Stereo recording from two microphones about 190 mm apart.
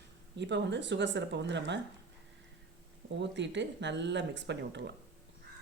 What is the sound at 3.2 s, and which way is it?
Speech, 70° right (ahead or behind).